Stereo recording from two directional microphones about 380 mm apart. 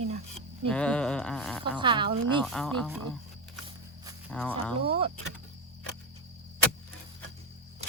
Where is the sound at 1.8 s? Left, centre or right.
Centre.